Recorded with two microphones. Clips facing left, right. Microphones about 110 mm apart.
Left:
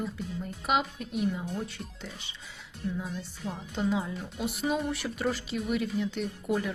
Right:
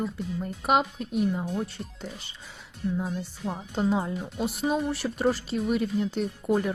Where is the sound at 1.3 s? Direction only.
45° right (ahead or behind).